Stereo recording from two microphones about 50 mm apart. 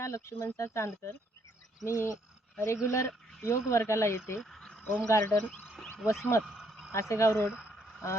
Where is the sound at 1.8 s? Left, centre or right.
Left.